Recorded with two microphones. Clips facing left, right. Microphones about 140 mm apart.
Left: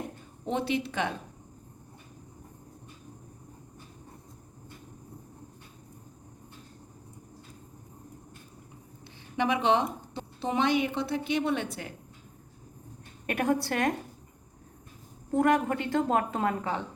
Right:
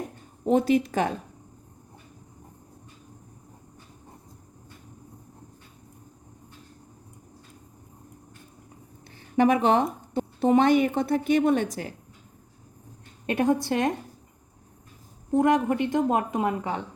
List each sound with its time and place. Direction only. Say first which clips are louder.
0.4 s a woman's voice: right 8 dB; 45° right (ahead or behind)
9.3 s a woman's voice: right 5 dB; 45° right (ahead or behind)
13.2 s a woman's voice: right 4 dB; 20° right (ahead or behind)
15.3 s a woman's voice: right 3 dB; 20° right (ahead or behind)